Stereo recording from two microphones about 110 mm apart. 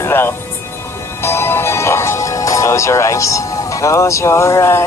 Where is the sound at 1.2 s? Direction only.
20° left (ahead or behind).